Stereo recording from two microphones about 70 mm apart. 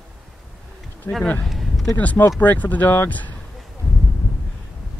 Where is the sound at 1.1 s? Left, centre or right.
Left.